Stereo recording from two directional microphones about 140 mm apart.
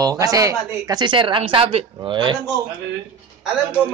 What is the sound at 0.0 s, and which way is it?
A woman's voice, 25° right (ahead or behind).